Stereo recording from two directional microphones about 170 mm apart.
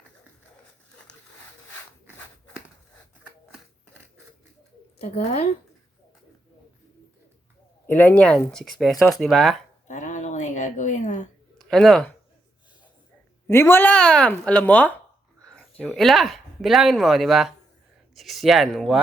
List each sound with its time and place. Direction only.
4.9 s a woman's voice: 35° left (ahead or behind)
7.9 s speech: 10° left (ahead or behind)
9.8 s a sound: 45° left (ahead or behind)
11.5 s speech: 5° left (ahead or behind)
13.5 s speech: 15° left (ahead or behind)
15.4 s a sound: 5° left (ahead or behind)
15.8 s speech: 5° left (ahead or behind)